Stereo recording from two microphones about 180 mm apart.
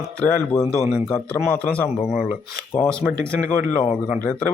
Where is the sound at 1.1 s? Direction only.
5° left (ahead or behind).